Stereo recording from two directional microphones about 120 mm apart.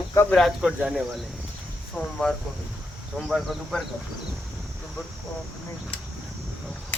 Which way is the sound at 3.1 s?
Centre (ahead or behind).